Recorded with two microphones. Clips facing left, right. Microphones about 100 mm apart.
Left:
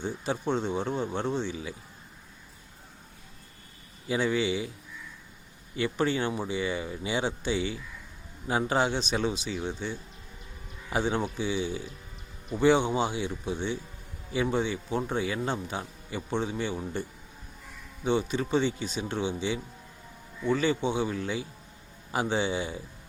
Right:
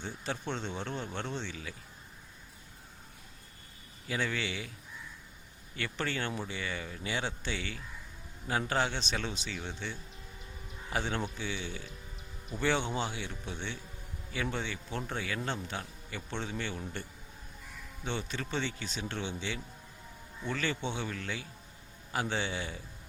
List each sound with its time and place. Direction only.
0.0 s a man's voice: 10° left (ahead or behind)
4.1 s a man's voice: 15° left (ahead or behind)
5.7 s a man's voice: 15° left (ahead or behind)